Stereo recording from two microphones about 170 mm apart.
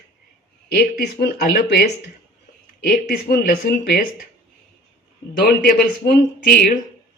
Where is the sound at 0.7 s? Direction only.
70° left (ahead or behind).